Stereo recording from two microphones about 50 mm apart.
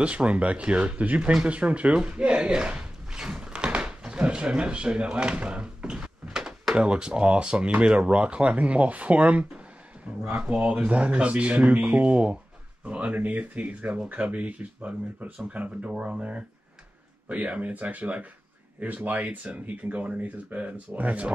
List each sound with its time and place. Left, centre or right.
0.0 s speech: right
3.1 s a sound: centre
4.2 s speech: centre